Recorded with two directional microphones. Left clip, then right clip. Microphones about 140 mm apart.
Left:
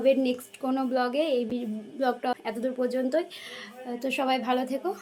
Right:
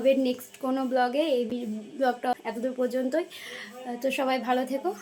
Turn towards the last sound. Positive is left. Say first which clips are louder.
# right 1 dB
turn(degrees=-15)  # may be behind; listen again after turning